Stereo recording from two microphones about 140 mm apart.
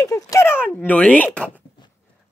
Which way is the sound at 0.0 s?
25° left (ahead or behind).